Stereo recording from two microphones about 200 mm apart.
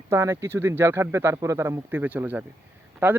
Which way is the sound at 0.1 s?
15° right (ahead or behind).